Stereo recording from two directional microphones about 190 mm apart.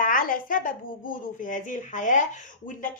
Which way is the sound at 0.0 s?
45° left (ahead or behind).